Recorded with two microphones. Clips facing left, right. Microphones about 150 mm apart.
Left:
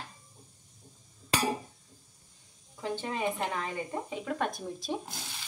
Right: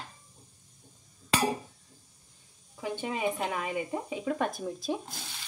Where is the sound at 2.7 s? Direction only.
10° right (ahead or behind).